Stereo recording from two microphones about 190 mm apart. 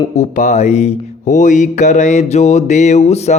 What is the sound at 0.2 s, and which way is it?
A man's voice, 40° left (ahead or behind).